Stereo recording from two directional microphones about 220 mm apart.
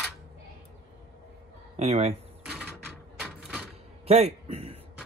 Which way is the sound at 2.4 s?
Centre (ahead or behind).